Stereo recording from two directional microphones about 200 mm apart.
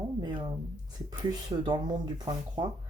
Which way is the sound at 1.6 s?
20° right (ahead or behind).